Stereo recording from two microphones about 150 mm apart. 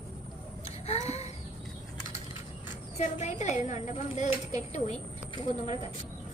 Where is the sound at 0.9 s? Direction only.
45° left (ahead or behind).